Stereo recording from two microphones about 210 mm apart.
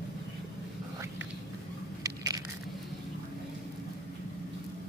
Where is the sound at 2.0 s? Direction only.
15° right (ahead or behind).